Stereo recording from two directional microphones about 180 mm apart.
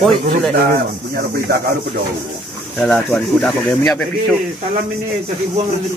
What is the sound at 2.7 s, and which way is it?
Speech, centre (ahead or behind).